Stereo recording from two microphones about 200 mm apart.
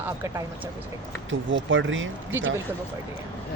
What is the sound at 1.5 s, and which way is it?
Speech, 70° right (ahead or behind).